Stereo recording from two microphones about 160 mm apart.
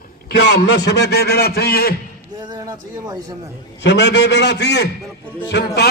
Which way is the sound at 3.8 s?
90° left.